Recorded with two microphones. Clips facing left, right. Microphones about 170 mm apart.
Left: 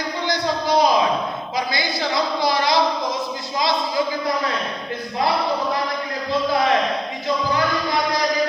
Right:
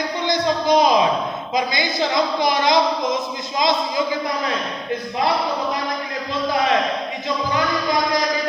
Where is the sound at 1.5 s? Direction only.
20° right (ahead or behind).